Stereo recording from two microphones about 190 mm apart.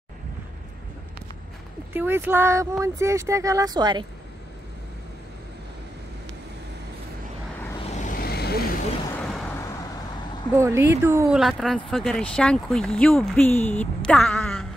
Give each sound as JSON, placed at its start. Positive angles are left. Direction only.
{"t": 2.0, "sound": "speech", "side_deg": -10}
{"t": 7.8, "sound": "vehicle", "side_deg": 40}
{"t": 9.1, "sound": "vehicle", "side_deg": 5}
{"t": 10.5, "sound": "speech", "side_deg": -15}